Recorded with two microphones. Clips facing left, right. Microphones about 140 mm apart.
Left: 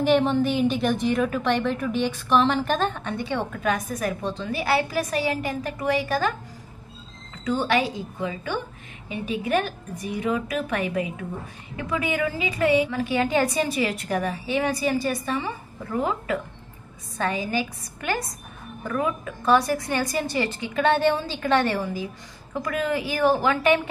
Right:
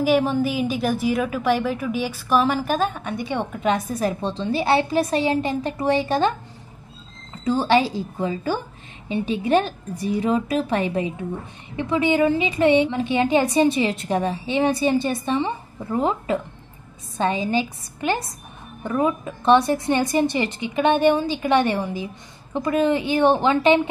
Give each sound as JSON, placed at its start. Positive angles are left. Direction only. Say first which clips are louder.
{"t": 0.0, "sound": "a woman's voice", "louder": "right 1 dB", "side_deg": -5}
{"t": 7.4, "sound": "a woman's voice", "louder": "right 4 dB", "side_deg": -30}